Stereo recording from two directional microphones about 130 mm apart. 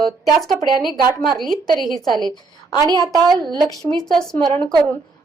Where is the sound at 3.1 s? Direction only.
30° right (ahead or behind).